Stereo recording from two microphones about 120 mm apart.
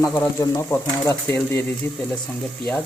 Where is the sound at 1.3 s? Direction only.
15° left (ahead or behind).